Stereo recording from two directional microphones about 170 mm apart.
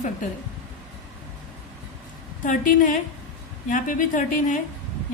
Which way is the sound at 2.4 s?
50° left (ahead or behind).